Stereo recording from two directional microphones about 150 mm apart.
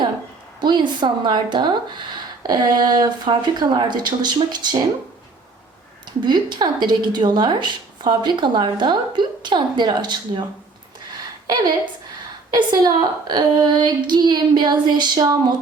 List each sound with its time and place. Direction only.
0.6 s a woman's voice: 30° right (ahead or behind)
6.2 s a woman's voice: 30° right (ahead or behind)
12.5 s a woman's voice: 25° right (ahead or behind)